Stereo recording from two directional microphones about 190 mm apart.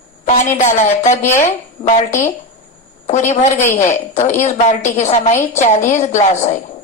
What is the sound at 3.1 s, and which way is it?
A woman's voice, 40° left (ahead or behind).